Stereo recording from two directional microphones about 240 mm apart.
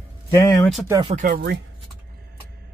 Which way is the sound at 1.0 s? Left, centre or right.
Right.